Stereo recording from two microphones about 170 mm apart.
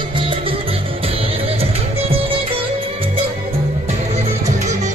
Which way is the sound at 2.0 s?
35° right (ahead or behind).